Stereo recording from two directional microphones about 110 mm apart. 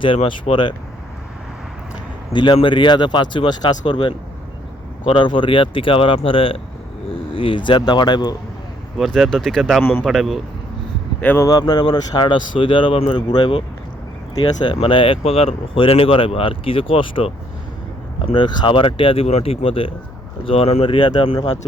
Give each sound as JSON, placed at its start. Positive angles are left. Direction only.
{"t": 0.0, "sound": "speech", "side_deg": 50}
{"t": 2.3, "sound": "speech", "side_deg": 45}
{"t": 9.0, "sound": "speech", "side_deg": 5}
{"t": 11.2, "sound": "speech", "side_deg": 15}
{"t": 11.4, "sound": "speech", "side_deg": 35}